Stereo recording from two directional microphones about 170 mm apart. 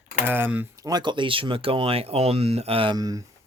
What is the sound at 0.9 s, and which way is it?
Speech, 25° right (ahead or behind).